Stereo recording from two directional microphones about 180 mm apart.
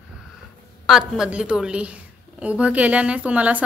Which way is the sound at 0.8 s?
5° right (ahead or behind).